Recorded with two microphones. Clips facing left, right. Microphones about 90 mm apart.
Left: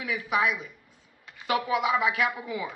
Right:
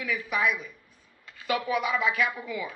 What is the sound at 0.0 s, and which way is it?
A woman's voice, 20° left (ahead or behind).